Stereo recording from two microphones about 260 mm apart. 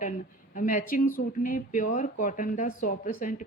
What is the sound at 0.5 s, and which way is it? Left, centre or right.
Speech, left.